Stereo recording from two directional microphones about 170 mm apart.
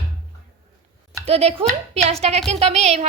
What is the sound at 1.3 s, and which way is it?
A woman's voice, 35° right (ahead or behind).